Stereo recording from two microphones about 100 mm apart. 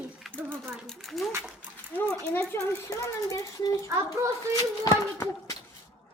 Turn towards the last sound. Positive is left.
turn(degrees=35)  # may be behind; listen again after turning